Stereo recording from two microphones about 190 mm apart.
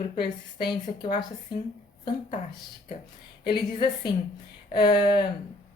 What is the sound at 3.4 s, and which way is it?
A woman's voice, 25° left (ahead or behind).